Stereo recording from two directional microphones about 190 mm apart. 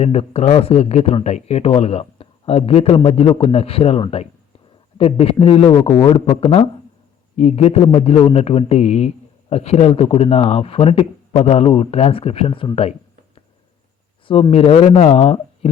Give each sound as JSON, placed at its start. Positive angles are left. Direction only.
{"t": 0.0, "sound": "a man's voice", "side_deg": 30}
{"t": 14.3, "sound": "a man's voice", "side_deg": 30}